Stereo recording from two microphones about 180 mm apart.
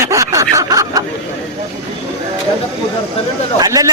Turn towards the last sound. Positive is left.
turn(degrees=-20)  # may be behind; listen again after turning